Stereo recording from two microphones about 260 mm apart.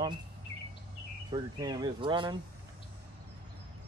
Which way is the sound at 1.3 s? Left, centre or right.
Centre.